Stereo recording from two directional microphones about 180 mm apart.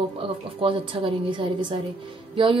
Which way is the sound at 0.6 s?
30° right (ahead or behind).